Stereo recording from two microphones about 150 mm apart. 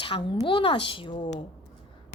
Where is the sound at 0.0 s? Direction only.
35° left (ahead or behind).